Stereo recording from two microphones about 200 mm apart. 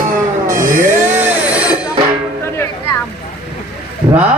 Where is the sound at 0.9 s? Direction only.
10° right (ahead or behind).